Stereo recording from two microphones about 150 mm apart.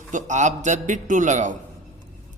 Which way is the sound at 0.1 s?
55° right (ahead or behind).